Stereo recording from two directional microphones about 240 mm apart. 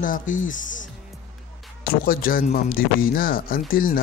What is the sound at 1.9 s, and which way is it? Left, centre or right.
Speech, left.